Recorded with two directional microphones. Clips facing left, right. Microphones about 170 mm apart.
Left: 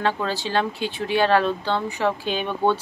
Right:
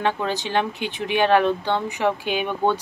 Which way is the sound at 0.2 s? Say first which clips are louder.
Even; 20° right (ahead or behind).